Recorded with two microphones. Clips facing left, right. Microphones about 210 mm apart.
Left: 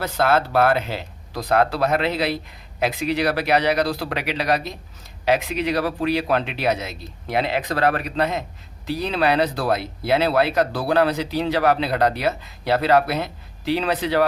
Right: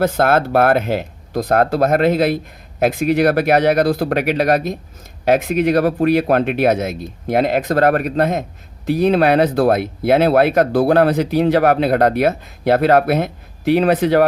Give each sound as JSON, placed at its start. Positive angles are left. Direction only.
{"t": 0.0, "sound": "speech", "side_deg": -50}